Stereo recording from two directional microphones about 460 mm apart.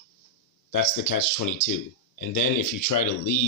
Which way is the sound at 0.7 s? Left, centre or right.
Left.